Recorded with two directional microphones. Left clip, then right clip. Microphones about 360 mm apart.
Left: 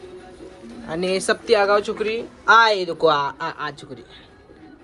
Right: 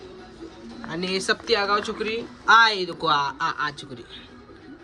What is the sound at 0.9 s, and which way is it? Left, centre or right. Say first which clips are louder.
Speech: left 4 dB; centre.